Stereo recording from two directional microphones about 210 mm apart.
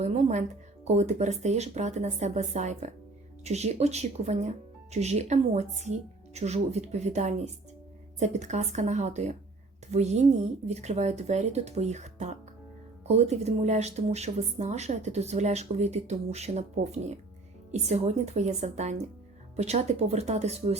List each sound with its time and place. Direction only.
0.0 s speech: 35° right (ahead or behind)